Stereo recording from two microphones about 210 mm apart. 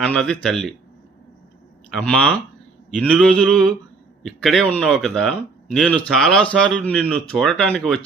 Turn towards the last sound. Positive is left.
turn(degrees=5)  # may be behind; listen again after turning